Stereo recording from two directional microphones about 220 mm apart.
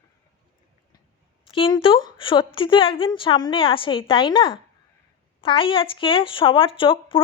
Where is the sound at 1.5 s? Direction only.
20° left (ahead or behind).